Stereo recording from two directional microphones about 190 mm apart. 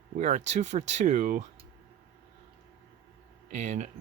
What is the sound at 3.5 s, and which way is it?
Speech, 40° right (ahead or behind).